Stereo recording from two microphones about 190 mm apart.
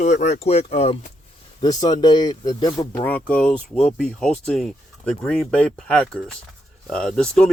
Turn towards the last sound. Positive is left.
turn(degrees=5)  # may be behind; listen again after turning